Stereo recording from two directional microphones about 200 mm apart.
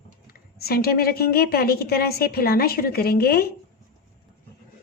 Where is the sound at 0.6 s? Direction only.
50° left (ahead or behind).